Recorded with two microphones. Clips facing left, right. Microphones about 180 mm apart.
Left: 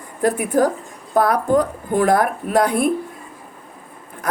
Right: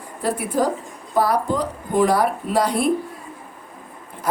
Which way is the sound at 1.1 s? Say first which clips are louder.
Left 4 dB; 50° left (ahead or behind).